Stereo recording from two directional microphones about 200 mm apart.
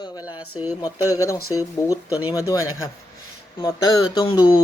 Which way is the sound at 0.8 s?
15° left (ahead or behind).